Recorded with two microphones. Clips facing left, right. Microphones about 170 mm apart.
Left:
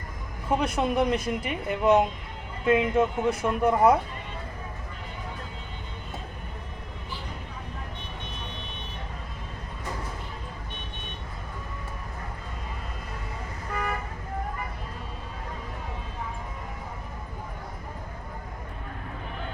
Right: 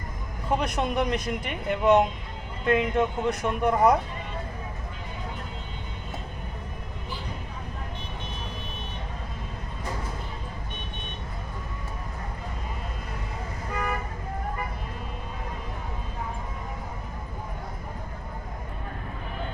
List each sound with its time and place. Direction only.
0.6 s speech: 5° left (ahead or behind)